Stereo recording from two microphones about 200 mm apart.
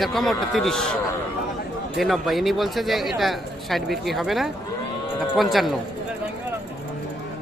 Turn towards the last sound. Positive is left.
turn(degrees=0)  # may be behind; listen again after turning